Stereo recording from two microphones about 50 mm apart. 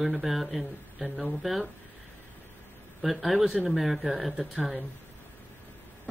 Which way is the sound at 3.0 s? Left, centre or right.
Centre.